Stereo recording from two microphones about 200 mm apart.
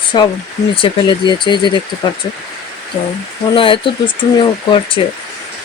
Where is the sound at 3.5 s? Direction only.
25° left (ahead or behind).